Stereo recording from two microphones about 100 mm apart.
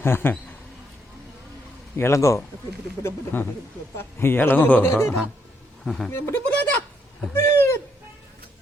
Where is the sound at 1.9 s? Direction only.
25° left (ahead or behind).